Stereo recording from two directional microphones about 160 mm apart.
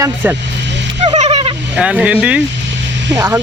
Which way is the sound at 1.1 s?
45° right (ahead or behind).